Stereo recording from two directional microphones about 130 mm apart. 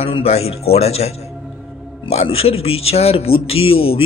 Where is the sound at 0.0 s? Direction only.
50° left (ahead or behind).